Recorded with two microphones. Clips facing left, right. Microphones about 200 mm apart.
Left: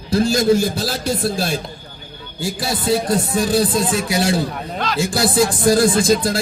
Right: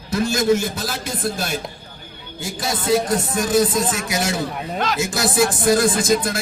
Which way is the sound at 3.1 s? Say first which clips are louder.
Left 2 dB; 30° left (ahead or behind).